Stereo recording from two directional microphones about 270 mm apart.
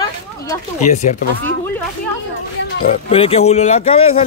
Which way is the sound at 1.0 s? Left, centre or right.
Left.